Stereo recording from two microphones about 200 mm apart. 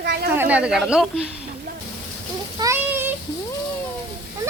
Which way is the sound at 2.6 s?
10° right (ahead or behind).